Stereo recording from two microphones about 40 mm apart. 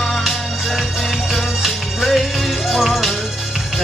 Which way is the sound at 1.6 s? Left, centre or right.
Centre.